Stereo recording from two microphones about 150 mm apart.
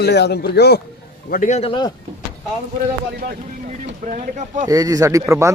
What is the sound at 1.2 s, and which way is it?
Speech, 70° left (ahead or behind).